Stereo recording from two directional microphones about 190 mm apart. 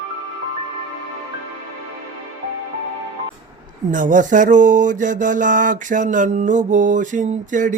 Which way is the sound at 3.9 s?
45° right (ahead or behind).